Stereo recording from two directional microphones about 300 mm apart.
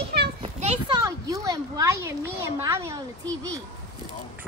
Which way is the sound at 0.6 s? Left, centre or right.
Centre.